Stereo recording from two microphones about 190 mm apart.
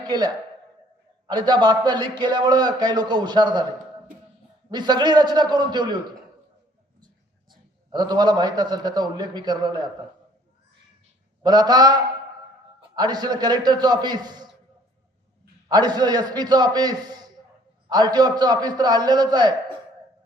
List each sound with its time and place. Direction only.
1.3 s a man's voice: 20° right (ahead or behind)
4.7 s a man's voice: 20° right (ahead or behind)
7.9 s a man's voice: 20° right (ahead or behind)
11.4 s a man's voice: 20° right (ahead or behind)
13.0 s a man's voice: 20° right (ahead or behind)
15.7 s a man's voice: 20° right (ahead or behind)